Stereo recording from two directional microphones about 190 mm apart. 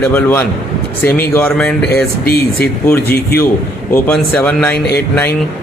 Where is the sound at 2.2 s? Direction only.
55° left (ahead or behind).